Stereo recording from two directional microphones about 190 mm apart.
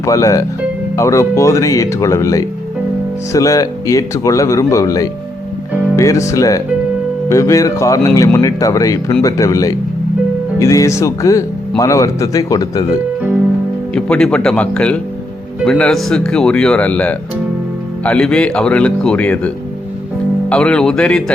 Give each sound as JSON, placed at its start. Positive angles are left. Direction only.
{"t": 0.0, "sound": "speech", "side_deg": 15}
{"t": 13.9, "sound": "speech", "side_deg": 5}
{"t": 20.5, "sound": "speech", "side_deg": 5}